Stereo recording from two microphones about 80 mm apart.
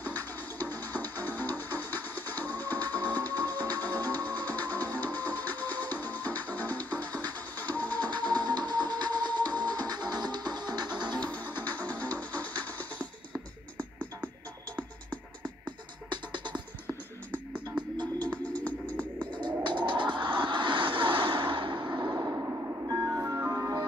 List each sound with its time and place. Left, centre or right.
0.6 s music: left
7.9 s music: right
11.2 s music: left
16.1 s music: right
17.8 s music: right
18.2 s music: centre
19.3 s music: right
22.2 s a sound: right
23.1 s music: right